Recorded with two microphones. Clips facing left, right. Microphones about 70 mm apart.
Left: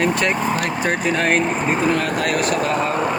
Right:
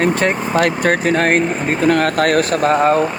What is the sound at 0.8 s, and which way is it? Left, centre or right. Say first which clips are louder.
Speech: right 5 dB; right.